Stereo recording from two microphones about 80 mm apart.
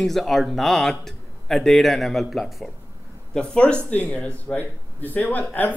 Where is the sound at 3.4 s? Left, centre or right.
Centre.